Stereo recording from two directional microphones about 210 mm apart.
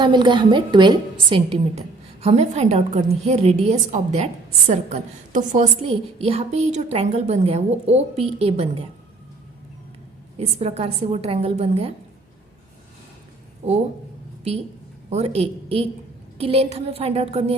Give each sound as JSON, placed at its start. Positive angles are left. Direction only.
{"t": 0.0, "sound": "a woman's voice", "side_deg": -20}
{"t": 10.3, "sound": "a woman's voice", "side_deg": -30}
{"t": 13.6, "sound": "a woman's voice", "side_deg": -30}
{"t": 15.1, "sound": "a woman's voice", "side_deg": -30}